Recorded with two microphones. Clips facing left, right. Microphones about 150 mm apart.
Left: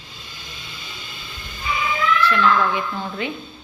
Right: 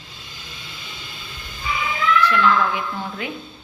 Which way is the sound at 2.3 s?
10° right (ahead or behind).